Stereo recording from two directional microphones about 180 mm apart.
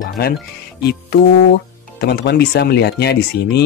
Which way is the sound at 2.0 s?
65° left (ahead or behind).